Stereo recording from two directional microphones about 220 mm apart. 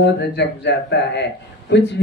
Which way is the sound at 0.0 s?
50° left (ahead or behind).